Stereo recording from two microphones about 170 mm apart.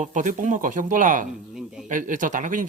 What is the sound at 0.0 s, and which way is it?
Speech, 45° right (ahead or behind).